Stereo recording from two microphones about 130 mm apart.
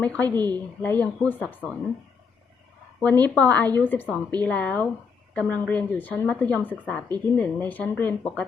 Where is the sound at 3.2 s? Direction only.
10° left (ahead or behind).